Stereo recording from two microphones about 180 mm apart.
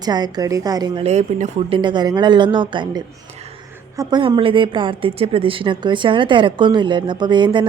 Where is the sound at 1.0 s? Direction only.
40° right (ahead or behind).